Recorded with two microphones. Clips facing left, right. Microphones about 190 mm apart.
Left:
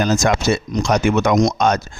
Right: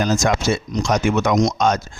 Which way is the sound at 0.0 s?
65° left (ahead or behind).